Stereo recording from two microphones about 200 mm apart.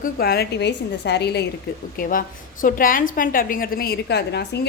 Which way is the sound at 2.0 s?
45° left (ahead or behind).